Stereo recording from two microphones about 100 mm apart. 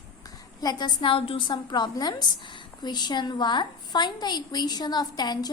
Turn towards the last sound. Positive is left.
turn(degrees=45)  # may be behind; listen again after turning